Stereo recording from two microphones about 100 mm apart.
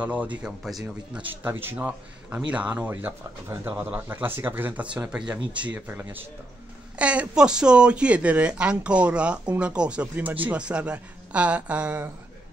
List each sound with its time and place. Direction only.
0.0 s speech: 15° right (ahead or behind)
4.9 s speech: 5° right (ahead or behind)